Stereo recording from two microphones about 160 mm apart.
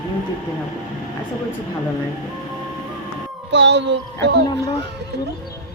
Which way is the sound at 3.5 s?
90° right.